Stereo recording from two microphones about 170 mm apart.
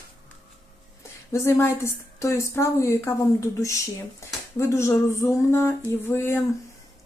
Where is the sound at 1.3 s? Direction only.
15° left (ahead or behind).